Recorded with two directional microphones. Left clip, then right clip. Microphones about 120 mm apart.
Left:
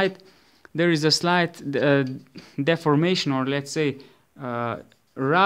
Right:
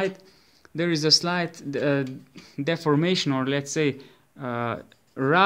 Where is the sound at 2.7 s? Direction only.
40° left (ahead or behind).